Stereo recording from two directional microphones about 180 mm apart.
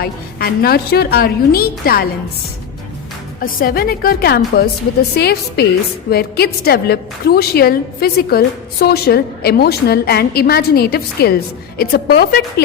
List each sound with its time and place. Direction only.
0.0 s a woman's voice: 60° left (ahead or behind)
3.4 s a woman's voice: 55° left (ahead or behind)